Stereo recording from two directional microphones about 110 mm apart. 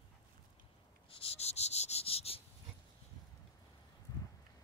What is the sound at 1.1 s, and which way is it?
Cricket, 60° left (ahead or behind).